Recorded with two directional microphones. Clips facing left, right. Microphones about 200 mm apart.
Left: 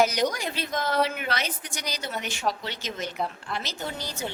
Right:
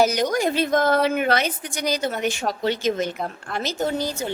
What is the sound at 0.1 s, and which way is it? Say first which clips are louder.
A woman's voice: right 6 dB; 50° right (ahead or behind).